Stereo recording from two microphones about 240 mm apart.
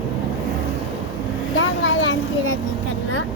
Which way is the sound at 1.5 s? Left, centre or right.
Left.